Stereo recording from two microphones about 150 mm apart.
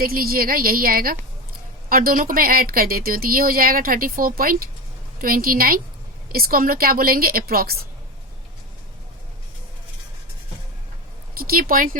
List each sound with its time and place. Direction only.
0.0 s a woman's voice: 80° right
11.3 s speech: 75° right (ahead or behind)